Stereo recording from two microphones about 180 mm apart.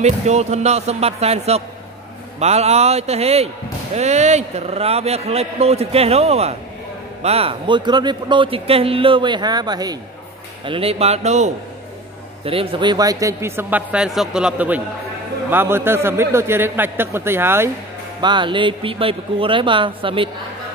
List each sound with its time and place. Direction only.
0.0 s a man's voice: 40° right (ahead or behind); by 17.6 s 15° right (ahead or behind)
18.2 s a man's voice: 25° right (ahead or behind)